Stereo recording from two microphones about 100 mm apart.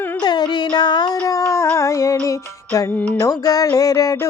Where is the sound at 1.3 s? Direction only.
30° left (ahead or behind).